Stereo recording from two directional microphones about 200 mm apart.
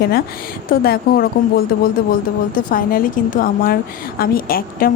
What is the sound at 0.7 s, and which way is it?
A woman's voice, 50° left (ahead or behind).